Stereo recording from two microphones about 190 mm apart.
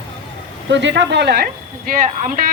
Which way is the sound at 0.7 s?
70° right (ahead or behind).